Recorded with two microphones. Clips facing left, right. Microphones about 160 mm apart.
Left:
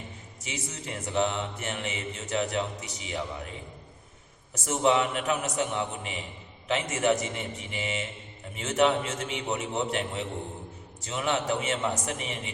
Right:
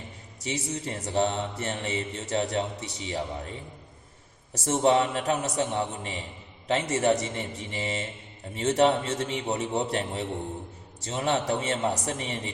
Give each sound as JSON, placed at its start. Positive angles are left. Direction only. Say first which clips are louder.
{"t": 0.4, "sound": "mantra", "louder": "right 6 dB", "side_deg": -35}
{"t": 4.5, "sound": "mantra", "louder": "right 2 dB", "side_deg": -30}